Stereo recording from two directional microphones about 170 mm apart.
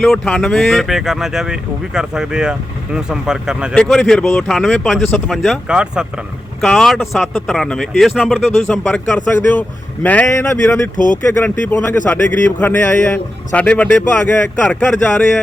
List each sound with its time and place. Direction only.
0.0 s speech: 5° left (ahead or behind)
8.7 s a man's voice: 10° left (ahead or behind)
10.9 s speech: 50° left (ahead or behind)
11.3 s a man's voice: 10° left (ahead or behind)